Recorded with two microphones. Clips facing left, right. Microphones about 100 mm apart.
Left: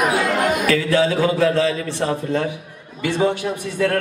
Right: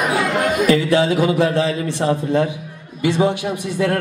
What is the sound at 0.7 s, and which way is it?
A man's voice, 20° right (ahead or behind).